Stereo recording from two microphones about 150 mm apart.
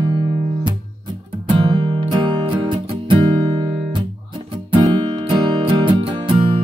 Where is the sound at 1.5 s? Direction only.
35° right (ahead or behind).